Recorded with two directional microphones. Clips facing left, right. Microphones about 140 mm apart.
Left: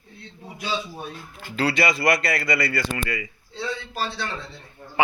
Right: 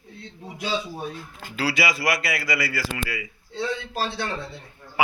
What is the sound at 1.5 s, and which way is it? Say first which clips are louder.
Speech: left 2 dB; 5° right (ahead or behind).